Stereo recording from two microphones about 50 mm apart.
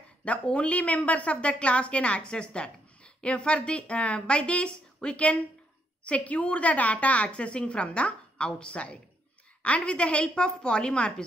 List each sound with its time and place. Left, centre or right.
0.2 s a woman's voice: left